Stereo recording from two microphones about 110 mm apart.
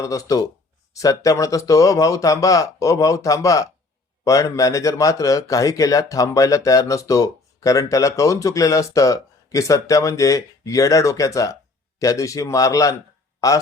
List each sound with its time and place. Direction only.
0.0 s speech: 30° left (ahead or behind)